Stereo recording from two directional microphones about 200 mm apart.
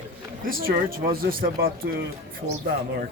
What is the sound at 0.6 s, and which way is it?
Speech, 45° right (ahead or behind).